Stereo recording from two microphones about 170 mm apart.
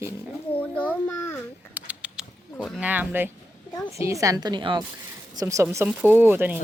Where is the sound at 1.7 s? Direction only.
5° right (ahead or behind).